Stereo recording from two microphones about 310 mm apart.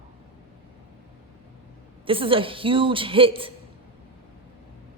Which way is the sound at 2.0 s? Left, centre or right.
Centre.